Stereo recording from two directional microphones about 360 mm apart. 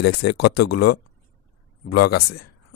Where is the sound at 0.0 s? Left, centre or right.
Left.